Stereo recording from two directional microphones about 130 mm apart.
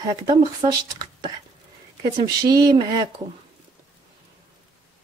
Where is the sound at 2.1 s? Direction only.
30° right (ahead or behind).